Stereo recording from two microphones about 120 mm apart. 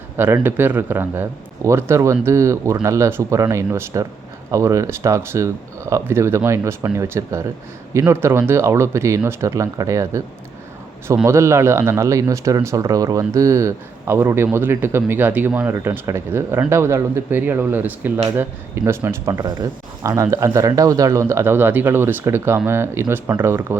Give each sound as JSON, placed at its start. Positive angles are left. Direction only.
{"t": 0.2, "sound": "speech", "side_deg": -15}
{"t": 11.3, "sound": "speech", "side_deg": -25}